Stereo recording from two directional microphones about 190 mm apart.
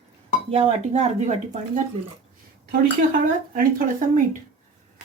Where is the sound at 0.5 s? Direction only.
30° right (ahead or behind).